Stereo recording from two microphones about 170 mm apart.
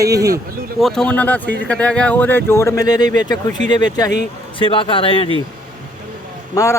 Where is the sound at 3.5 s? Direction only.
45° right (ahead or behind).